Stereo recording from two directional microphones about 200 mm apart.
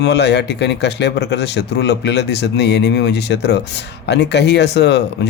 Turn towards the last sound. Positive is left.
turn(degrees=55)  # may be behind; listen again after turning